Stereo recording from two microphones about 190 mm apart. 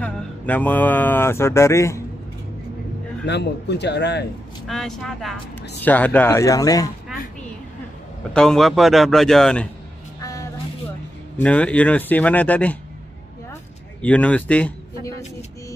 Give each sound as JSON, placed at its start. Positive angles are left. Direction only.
{"t": 0.0, "sound": "speech", "side_deg": 10}
{"t": 3.3, "sound": "speech", "side_deg": 65}
{"t": 4.6, "sound": "a man's voice", "side_deg": 0}
{"t": 8.3, "sound": "a man's voice", "side_deg": 5}
{"t": 10.2, "sound": "vehicle", "side_deg": 20}
{"t": 11.3, "sound": "speech", "side_deg": 5}
{"t": 14.0, "sound": "speech", "side_deg": 5}